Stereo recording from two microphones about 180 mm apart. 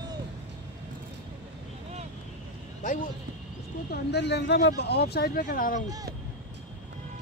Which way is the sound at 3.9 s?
70° left (ahead or behind).